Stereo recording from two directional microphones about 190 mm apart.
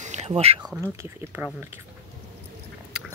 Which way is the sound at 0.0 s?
35° right (ahead or behind).